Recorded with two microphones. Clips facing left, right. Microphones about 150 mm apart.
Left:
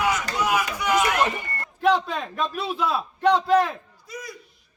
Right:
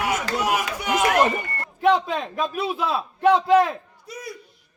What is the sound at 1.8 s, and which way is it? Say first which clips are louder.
A man's voice: right 2 dB; 5° right (ahead or behind).